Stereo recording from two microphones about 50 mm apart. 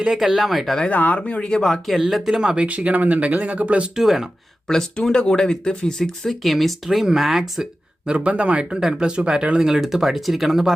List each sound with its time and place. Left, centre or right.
0.3 s speech: centre
0.9 s speech: left
1.2 s speech: centre
2.0 s speech: centre
2.6 s speech: right
3.9 s speech: centre
4.7 s speech: centre
8.0 s speech: right; by 10.8 s centre